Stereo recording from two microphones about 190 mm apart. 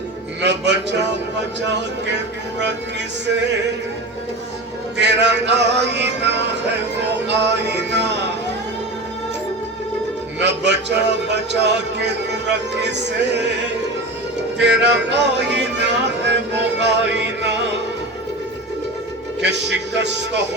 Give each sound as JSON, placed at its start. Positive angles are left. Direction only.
{"t": 0.4, "sound": "a man's voice", "side_deg": -65}
{"t": 4.9, "sound": "music", "side_deg": -65}
{"t": 10.4, "sound": "music", "side_deg": -65}
{"t": 14.6, "sound": "music", "side_deg": -65}
{"t": 19.4, "sound": "music", "side_deg": -65}